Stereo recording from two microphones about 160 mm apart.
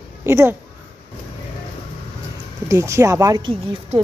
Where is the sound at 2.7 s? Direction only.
15° right (ahead or behind).